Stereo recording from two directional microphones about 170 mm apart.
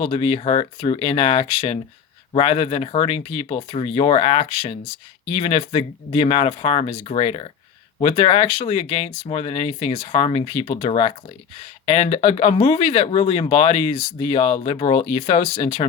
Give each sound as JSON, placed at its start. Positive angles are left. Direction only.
{"t": 0.0, "sound": "speech", "side_deg": 35}